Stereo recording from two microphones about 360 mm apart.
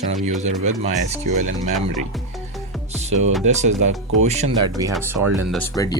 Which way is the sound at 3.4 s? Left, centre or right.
Centre.